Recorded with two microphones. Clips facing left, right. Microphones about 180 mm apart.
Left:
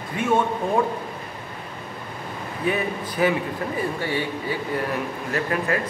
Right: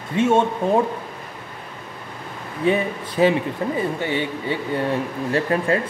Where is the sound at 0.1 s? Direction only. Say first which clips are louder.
Right 4 dB; 25° right (ahead or behind).